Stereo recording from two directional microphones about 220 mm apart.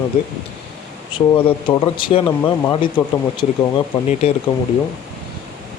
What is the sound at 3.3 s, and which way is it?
Speech, 20° left (ahead or behind).